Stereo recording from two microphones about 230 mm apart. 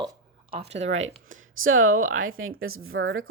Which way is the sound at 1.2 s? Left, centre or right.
Right.